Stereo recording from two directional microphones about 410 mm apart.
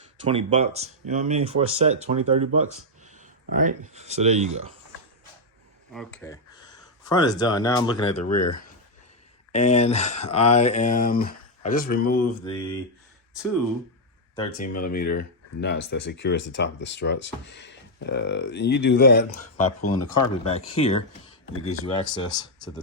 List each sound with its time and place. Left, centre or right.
0.3 s speech: centre
5.9 s speech: centre
8.2 s speech: left
9.5 s speech: centre
14.3 s speech: centre
19.6 s speech: left
20.3 s speech: centre